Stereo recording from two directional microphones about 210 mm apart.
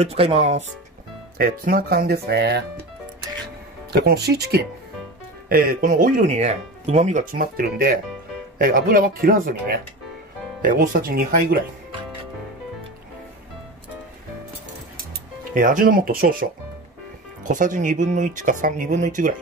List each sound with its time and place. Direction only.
0.0 s speech: 30° right (ahead or behind)
1.4 s speech: 45° right (ahead or behind)
3.9 s speech: 50° right (ahead or behind)
15.5 s speech: 40° right (ahead or behind)